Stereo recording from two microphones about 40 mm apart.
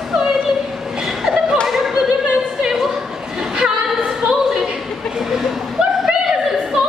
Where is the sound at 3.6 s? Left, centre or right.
Centre.